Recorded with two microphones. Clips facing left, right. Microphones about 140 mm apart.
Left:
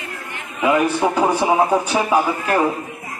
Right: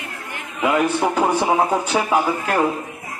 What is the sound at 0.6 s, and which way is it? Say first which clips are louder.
Speech: left 2 dB; 5° left (ahead or behind).